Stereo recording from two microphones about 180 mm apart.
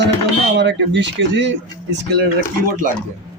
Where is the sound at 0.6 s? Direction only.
80° right.